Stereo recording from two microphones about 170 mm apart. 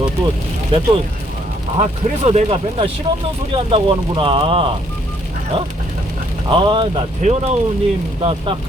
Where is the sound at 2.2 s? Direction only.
35° right (ahead or behind).